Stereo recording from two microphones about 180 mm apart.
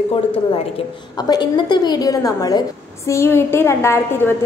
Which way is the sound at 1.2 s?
25° left (ahead or behind).